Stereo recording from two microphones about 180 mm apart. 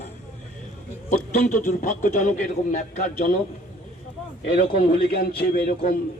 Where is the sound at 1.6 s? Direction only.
45° left (ahead or behind).